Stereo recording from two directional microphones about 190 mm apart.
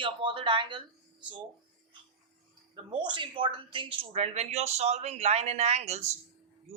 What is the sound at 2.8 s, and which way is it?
A woman's voice, 25° right (ahead or behind).